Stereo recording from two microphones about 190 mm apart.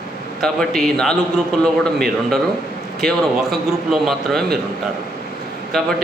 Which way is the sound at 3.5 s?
Centre (ahead or behind).